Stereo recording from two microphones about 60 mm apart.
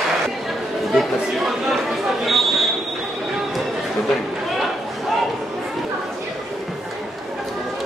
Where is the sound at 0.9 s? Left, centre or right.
Centre.